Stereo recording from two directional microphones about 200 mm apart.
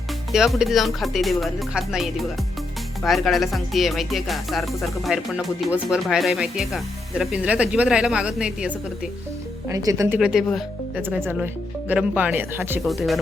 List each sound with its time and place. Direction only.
0.3 s speech: centre (ahead or behind)
9.6 s speech: 15° right (ahead or behind)
10.2 s speech: centre (ahead or behind)